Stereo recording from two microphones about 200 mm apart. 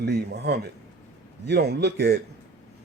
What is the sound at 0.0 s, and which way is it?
Speech, 55° right (ahead or behind).